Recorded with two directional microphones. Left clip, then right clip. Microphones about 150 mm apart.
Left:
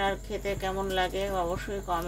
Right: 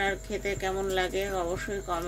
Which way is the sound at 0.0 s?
5° right (ahead or behind).